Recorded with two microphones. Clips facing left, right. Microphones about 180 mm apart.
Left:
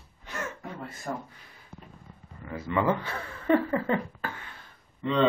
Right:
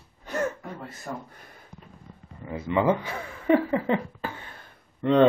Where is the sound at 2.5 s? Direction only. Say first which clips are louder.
Right 3 dB; 20° right (ahead or behind).